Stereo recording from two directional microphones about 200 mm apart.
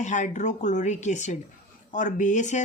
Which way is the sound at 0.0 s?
35° left (ahead or behind).